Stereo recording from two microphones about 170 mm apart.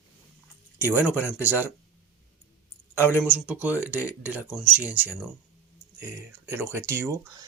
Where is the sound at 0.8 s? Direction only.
10° right (ahead or behind).